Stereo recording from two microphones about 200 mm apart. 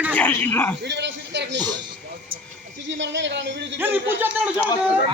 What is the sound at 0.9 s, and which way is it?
Speech, 60° right (ahead or behind).